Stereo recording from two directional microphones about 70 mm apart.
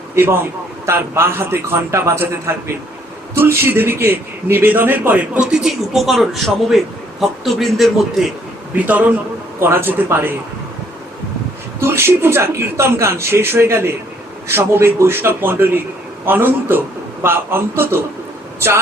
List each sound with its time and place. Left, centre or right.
0.9 s speech: right
3.3 s a man's voice: right
5.4 s speech: centre
8.7 s a man's voice: right
9.6 s speech: right
11.8 s a man's voice: right